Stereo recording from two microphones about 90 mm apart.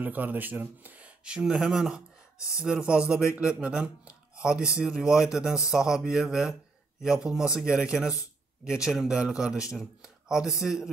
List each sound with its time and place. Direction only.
0.0 s speech: 20° right (ahead or behind)